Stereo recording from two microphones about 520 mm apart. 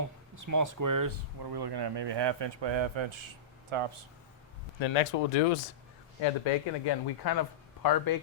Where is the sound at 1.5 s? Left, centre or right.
Right.